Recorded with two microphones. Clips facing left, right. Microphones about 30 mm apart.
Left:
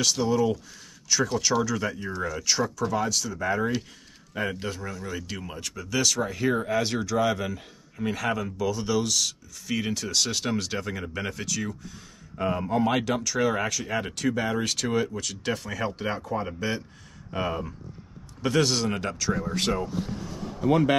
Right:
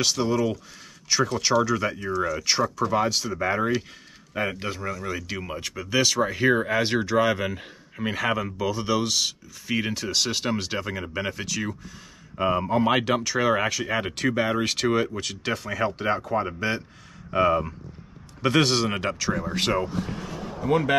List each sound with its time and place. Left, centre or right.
0.0 s speech: right
15.5 s speech: centre
18.4 s speech: right
20.0 s a sound: right
20.6 s speech: centre